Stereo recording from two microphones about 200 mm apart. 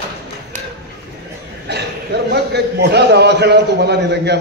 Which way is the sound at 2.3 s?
55° right (ahead or behind).